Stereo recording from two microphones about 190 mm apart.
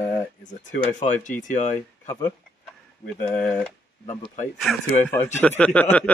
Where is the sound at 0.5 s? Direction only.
40° left (ahead or behind).